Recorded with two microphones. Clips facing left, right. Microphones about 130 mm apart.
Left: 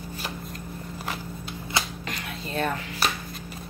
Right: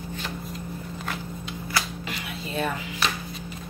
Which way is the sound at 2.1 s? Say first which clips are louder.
Left 1 dB; 5° right (ahead or behind).